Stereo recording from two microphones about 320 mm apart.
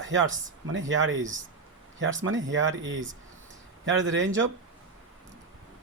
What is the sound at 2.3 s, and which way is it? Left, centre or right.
Speech, right.